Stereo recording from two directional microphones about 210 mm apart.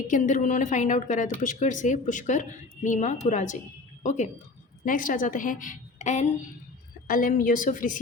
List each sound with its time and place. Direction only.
0.1 s a woman's voice: 35° left (ahead or behind)